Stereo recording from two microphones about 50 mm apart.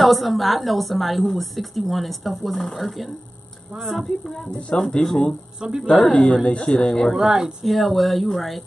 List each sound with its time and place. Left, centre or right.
0.0 s a woman's voice: centre
4.5 s speech: left
4.7 s speech: centre
5.6 s speech: centre
6.1 s speech: centre
7.2 s speech: centre
7.6 s a woman's voice: centre